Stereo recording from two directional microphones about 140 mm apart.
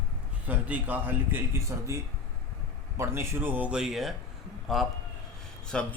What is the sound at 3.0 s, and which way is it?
A man's voice, 15° right (ahead or behind).